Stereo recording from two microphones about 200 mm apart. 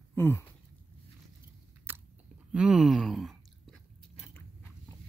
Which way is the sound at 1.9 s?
10° right (ahead or behind).